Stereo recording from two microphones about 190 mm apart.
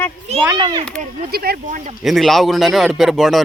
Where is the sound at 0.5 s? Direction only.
25° right (ahead or behind).